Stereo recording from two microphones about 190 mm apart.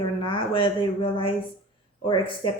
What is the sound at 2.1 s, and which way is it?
Speech, 25° left (ahead or behind).